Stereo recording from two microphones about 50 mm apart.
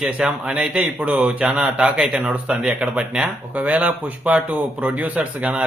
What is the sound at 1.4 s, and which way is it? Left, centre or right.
Speech, centre.